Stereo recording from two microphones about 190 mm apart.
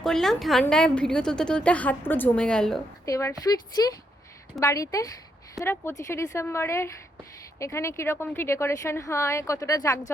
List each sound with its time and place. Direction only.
0.0 s a woman's voice: centre (ahead or behind)
3.1 s speech: 15° left (ahead or behind)